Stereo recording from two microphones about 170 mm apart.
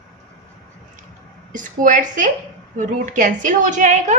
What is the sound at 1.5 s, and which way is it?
A woman's voice, 50° right (ahead or behind).